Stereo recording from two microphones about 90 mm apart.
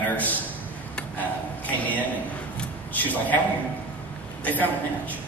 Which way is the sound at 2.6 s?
20° left (ahead or behind).